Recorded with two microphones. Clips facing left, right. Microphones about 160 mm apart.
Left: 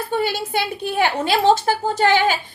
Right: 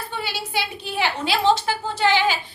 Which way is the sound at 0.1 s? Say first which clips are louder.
Left 8 dB; 50° left (ahead or behind).